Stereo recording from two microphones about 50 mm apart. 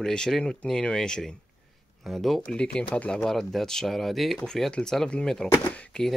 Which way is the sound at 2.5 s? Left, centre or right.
Centre.